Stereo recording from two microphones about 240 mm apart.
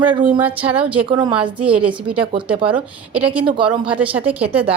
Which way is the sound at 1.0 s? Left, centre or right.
Centre.